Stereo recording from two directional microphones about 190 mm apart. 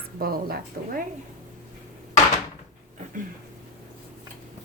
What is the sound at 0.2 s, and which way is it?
Speech, 50° right (ahead or behind).